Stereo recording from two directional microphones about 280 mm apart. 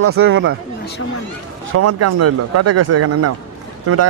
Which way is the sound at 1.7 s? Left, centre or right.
Right.